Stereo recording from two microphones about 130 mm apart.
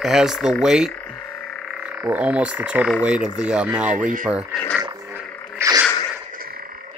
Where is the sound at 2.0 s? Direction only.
10° right (ahead or behind).